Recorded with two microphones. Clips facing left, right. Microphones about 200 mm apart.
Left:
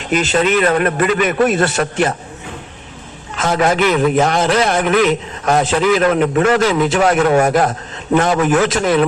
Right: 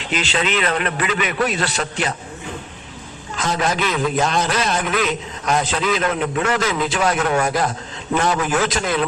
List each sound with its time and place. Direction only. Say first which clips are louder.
0.0 s a man's voice: left 7 dB; 45° left (ahead or behind)
3.3 s a man's voice: left 6 dB; 60° left (ahead or behind)